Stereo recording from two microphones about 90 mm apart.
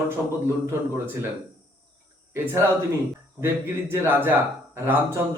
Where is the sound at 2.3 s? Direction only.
30° right (ahead or behind).